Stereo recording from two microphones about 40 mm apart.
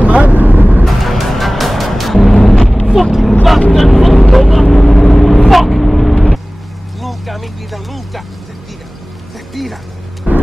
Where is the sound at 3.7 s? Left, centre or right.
Centre.